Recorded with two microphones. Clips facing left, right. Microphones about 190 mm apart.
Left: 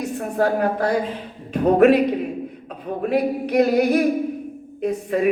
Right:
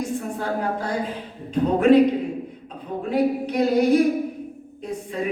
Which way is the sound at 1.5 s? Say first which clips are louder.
Left 3 dB; 65° left (ahead or behind).